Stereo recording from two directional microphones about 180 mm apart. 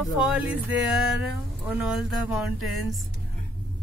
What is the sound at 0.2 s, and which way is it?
Music, 5° right (ahead or behind).